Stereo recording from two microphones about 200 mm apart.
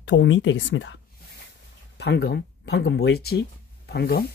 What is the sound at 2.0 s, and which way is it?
Speech, 55° left (ahead or behind).